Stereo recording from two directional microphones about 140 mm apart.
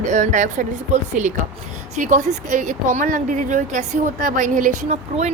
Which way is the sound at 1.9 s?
60° right (ahead or behind).